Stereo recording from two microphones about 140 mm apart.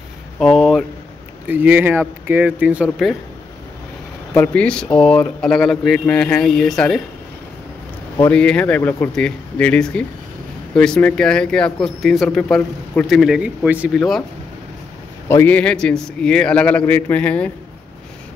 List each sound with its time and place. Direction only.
0.4 s speech: centre (ahead or behind)
1.5 s speech: 15° right (ahead or behind)
4.3 s speech: 10° left (ahead or behind)
8.3 s speech: 10° left (ahead or behind)
15.2 s speech: 15° left (ahead or behind)